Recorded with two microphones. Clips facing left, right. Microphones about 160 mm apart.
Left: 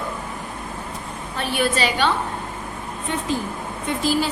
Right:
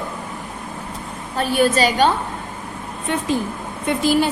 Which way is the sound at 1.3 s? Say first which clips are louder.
Right 5 dB; 40° right (ahead or behind).